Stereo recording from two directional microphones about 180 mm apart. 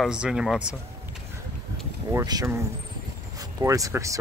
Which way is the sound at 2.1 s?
20° right (ahead or behind).